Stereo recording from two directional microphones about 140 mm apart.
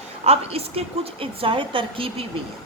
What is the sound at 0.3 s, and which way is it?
A woman's voice, 45° right (ahead or behind).